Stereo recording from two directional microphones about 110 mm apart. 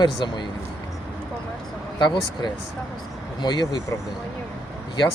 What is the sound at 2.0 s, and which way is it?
Speech, 45° left (ahead or behind).